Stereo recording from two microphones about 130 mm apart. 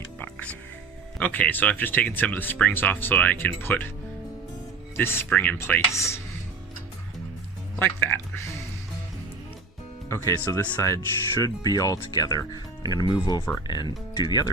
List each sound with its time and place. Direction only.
0.2 s music: 10° left (ahead or behind)
1.2 s speech: 15° left (ahead or behind)
4.9 s speech: 20° left (ahead or behind)
7.8 s speech: 15° left (ahead or behind)
10.1 s speech: 20° left (ahead or behind)